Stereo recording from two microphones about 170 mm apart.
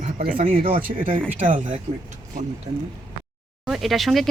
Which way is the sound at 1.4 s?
50° right (ahead or behind).